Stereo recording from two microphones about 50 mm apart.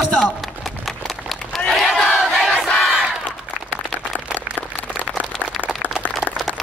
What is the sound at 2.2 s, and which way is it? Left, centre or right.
Crowd, centre.